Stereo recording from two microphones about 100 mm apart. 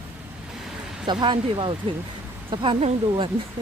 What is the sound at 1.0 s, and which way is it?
Speech, 55° right (ahead or behind).